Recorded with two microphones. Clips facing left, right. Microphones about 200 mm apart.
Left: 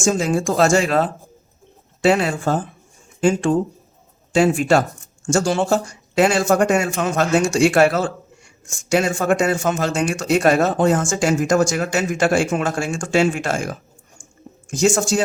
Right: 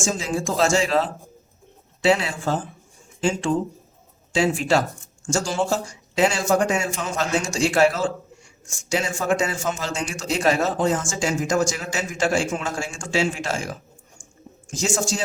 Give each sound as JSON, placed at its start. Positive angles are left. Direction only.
{"t": 0.0, "sound": "a man's voice", "side_deg": 60}